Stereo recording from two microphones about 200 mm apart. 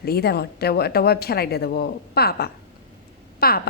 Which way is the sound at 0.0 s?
50° left (ahead or behind).